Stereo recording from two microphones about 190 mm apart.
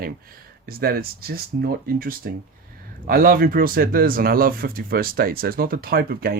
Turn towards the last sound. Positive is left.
turn(degrees=-50)  # may be behind; listen again after turning